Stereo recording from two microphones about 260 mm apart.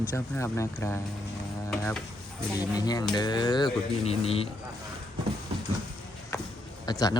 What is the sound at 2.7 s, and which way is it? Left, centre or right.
A man's voice, centre.